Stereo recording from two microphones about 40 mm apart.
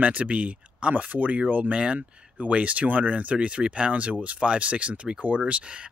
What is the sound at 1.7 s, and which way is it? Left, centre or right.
Speech, right.